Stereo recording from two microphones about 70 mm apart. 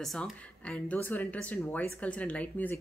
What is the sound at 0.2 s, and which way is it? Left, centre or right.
Speech, centre.